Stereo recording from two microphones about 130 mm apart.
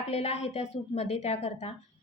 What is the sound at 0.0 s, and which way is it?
A woman's voice, 50° left (ahead or behind).